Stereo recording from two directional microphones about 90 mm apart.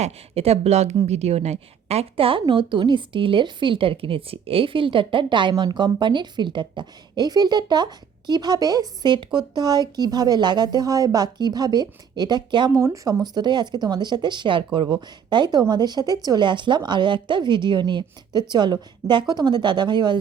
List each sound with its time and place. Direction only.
2.1 s a woman's voice: 85° right; by 12.7 s 55° right (ahead or behind)
12.7 s speech: 40° right (ahead or behind); by 14.9 s 65° right (ahead or behind)
15.3 s a woman's voice: 50° right (ahead or behind)